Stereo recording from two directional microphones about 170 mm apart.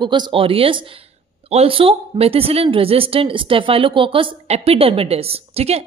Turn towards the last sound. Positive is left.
turn(degrees=-35)  # may be behind; listen again after turning